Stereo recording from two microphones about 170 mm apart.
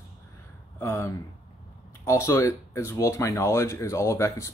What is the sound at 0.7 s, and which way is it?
Speech, 15° left (ahead or behind).